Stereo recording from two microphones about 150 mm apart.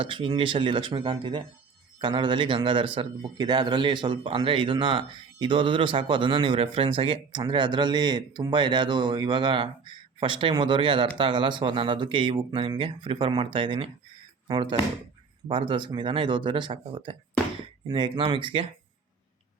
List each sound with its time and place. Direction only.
0.0 s a man's voice: 35° right (ahead or behind)